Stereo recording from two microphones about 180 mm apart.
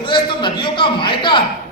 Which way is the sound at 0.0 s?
25° left (ahead or behind).